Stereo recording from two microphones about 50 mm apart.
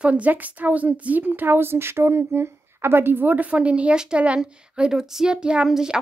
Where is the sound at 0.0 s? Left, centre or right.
Right.